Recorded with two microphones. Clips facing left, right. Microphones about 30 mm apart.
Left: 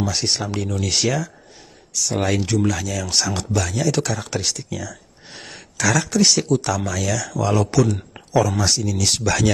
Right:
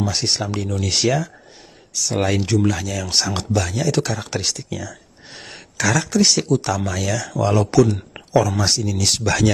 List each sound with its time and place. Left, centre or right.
0.0 s speech: centre
4.7 s gasp: centre
5.8 s speech: centre
7.9 s a sound: right
8.4 s speech: centre